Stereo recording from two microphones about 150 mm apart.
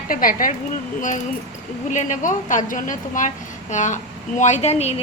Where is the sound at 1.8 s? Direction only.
60° left (ahead or behind).